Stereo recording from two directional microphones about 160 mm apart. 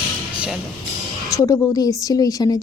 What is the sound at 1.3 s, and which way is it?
A woman's voice, 20° left (ahead or behind).